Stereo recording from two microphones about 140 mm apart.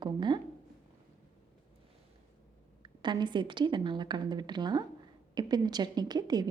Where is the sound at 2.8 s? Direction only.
35° right (ahead or behind).